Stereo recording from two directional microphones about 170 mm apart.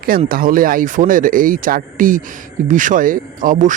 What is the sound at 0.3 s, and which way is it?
Speech, 55° right (ahead or behind).